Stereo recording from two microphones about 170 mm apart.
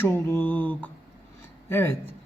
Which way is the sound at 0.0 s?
10° left (ahead or behind).